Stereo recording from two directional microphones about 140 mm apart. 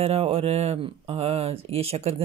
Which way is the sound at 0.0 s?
45° right (ahead or behind).